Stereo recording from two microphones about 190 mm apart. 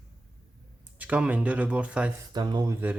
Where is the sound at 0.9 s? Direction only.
5° right (ahead or behind).